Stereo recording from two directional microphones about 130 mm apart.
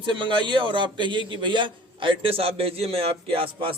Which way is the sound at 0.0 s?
35° right (ahead or behind).